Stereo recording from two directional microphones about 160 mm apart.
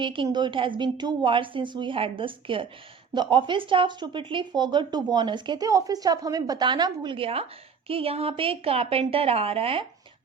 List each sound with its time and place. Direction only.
0.0 s a woman's voice: 30° right (ahead or behind)